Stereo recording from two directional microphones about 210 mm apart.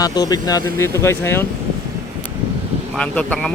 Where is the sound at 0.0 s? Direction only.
20° left (ahead or behind).